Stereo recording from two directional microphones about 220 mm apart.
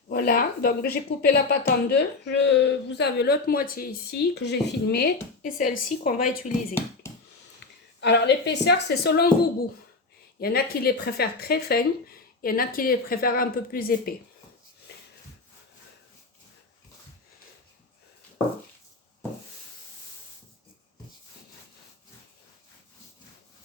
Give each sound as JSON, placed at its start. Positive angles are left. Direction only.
{"t": 0.1, "sound": "speech", "side_deg": 40}
{"t": 5.4, "sound": "a woman's voice", "side_deg": 35}
{"t": 7.6, "sound": "a woman's voice", "side_deg": 50}
{"t": 14.9, "sound": "a sound", "side_deg": 45}